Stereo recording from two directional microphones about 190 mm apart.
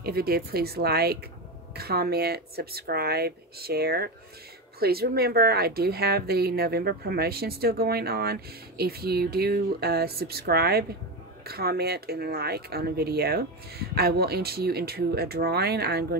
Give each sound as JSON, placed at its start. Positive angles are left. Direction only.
{"t": 0.0, "sound": "a woman's voice", "side_deg": -55}